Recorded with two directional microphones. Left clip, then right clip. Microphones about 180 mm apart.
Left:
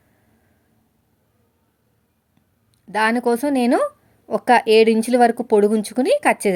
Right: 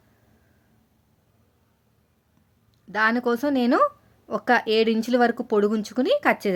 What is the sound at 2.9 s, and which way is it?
Speech, 20° left (ahead or behind).